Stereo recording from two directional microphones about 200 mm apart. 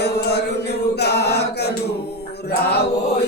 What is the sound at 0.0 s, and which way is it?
Chant, 55° left (ahead or behind).